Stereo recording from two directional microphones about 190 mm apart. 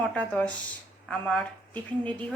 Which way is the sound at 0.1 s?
5° left (ahead or behind).